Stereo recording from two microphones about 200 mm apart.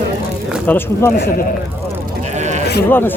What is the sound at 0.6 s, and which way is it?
Speech, 10° left (ahead or behind).